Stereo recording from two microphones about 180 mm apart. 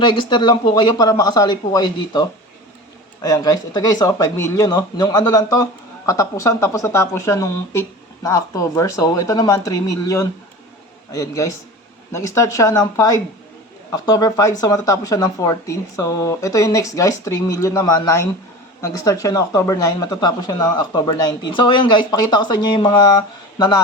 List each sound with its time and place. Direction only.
0.0 s speech: 25° left (ahead or behind)
3.2 s a woman's voice: 20° left (ahead or behind)